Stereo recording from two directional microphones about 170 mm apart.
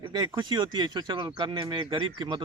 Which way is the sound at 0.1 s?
25° right (ahead or behind).